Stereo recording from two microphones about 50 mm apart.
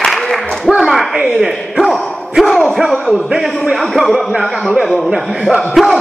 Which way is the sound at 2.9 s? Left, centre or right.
Centre.